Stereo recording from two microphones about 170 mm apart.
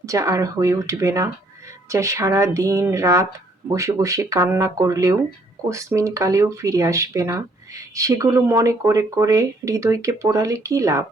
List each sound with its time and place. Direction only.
0.0 s speech: 20° right (ahead or behind)